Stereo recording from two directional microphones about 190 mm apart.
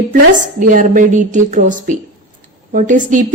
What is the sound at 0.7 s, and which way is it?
Speech, 45° right (ahead or behind).